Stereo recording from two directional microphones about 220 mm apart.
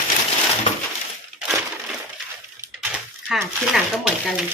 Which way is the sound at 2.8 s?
5° right (ahead or behind).